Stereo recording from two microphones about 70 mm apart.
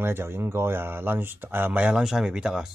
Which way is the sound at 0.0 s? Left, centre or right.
Right.